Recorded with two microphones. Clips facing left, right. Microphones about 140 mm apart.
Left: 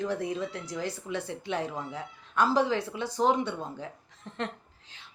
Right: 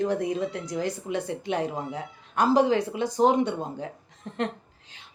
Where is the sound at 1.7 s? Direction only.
45° right (ahead or behind).